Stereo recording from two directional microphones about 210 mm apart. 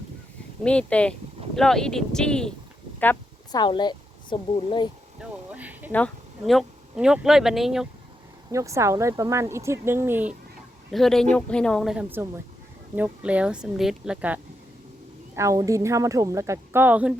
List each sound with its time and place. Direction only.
0.6 s speech: 5° left (ahead or behind)
3.0 s a sound: 10° left (ahead or behind)
3.6 s speech: 20° left (ahead or behind)
5.2 s a sound: 5° right (ahead or behind)
5.9 s speech: 5° left (ahead or behind)
8.5 s speech: 15° right (ahead or behind)
10.9 s speech: centre (ahead or behind)